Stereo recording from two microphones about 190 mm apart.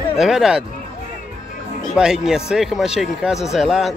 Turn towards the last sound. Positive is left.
turn(degrees=0)  # may be behind; listen again after turning